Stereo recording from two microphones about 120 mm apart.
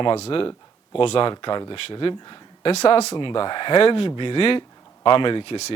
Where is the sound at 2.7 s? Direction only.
60° left (ahead or behind).